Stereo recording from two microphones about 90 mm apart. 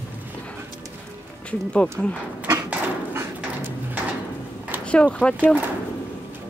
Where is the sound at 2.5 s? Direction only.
25° right (ahead or behind).